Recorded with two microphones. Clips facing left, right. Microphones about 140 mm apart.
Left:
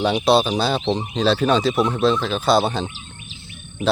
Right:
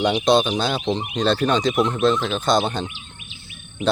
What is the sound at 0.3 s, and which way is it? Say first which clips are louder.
Speech: left 2 dB; 5° left (ahead or behind).